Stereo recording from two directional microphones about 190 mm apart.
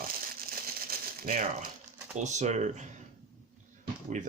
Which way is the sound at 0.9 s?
45° right (ahead or behind).